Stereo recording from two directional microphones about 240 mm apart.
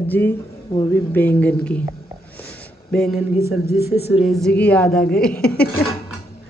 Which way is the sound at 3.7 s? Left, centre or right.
Left.